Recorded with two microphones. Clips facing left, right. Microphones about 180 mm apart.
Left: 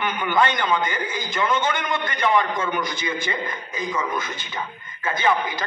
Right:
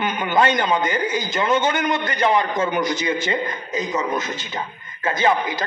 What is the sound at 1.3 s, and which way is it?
A man's voice, 20° right (ahead or behind).